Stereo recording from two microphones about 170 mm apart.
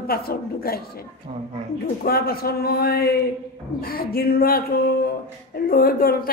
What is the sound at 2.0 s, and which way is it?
A man's voice, 65° left (ahead or behind).